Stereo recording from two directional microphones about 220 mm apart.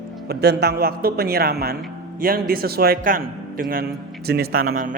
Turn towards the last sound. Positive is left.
turn(degrees=-40)  # may be behind; listen again after turning